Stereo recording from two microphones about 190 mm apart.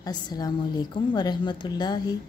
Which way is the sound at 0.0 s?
20° left (ahead or behind).